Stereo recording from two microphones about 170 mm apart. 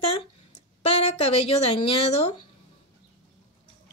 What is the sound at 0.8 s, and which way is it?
A woman's voice, 35° left (ahead or behind).